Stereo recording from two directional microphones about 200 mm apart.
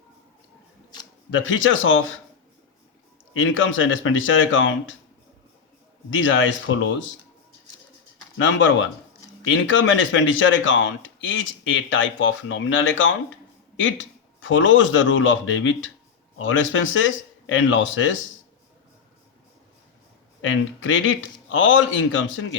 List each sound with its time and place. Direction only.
1.3 s speech: 70° left (ahead or behind)
3.3 s speech: 75° left (ahead or behind)
6.1 s speech: 75° left (ahead or behind)
8.4 s speech: 65° left (ahead or behind)
20.4 s speech: 70° left (ahead or behind)